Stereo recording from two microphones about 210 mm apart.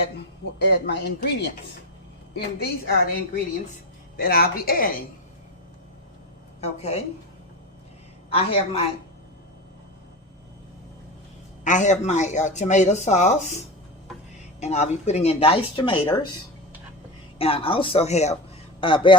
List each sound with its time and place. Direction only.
0.7 s speech: 50° left (ahead or behind)
4.2 s speech: 45° left (ahead or behind)
6.6 s speech: 30° left (ahead or behind)
8.3 s speech: 25° left (ahead or behind)
11.6 s speech: 35° left (ahead or behind)
14.6 s speech: 35° left (ahead or behind)
17.3 s speech: 25° left (ahead or behind)